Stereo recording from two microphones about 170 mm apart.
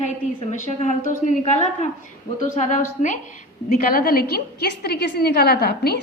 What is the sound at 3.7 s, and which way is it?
A woman's voice, 60° left (ahead or behind).